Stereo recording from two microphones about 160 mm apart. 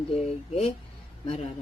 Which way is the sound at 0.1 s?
40° left (ahead or behind).